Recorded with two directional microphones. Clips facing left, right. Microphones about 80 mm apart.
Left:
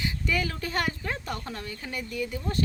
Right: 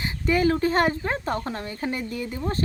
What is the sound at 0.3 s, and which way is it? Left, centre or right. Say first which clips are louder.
Speech: right 11 dB; right.